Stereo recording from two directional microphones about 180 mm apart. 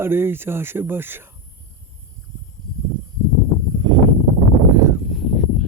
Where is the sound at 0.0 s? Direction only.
10° right (ahead or behind).